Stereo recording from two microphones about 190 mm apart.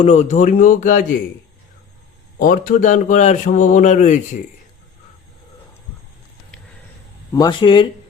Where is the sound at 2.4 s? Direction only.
45° left (ahead or behind).